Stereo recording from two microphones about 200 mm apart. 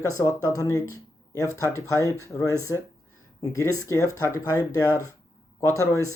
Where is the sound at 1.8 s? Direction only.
15° right (ahead or behind).